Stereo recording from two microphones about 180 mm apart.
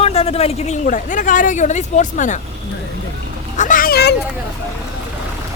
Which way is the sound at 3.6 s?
50° left (ahead or behind).